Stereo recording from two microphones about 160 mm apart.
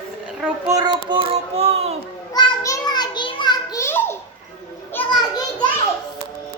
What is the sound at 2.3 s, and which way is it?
Children playing, 25° left (ahead or behind).